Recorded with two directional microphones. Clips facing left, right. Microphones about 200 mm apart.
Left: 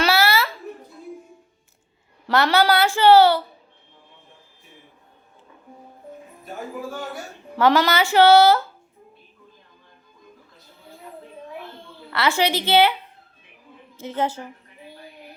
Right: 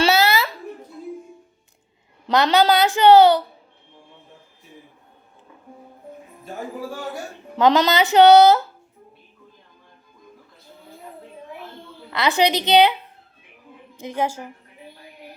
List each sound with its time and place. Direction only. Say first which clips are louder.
0.0 s a sound: right 2 dB; 20° right (ahead or behind)
2.2 s a woman's voice: right 2 dB; 20° right (ahead or behind)
7.5 s speech: right 1 dB; 20° right (ahead or behind)
12.1 s a woman's voice: right 2 dB; 15° right (ahead or behind)
13.9 s a woman's voice: even; 15° right (ahead or behind)